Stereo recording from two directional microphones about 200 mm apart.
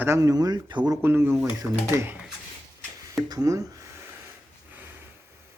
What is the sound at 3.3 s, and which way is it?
Speech, 15° right (ahead or behind).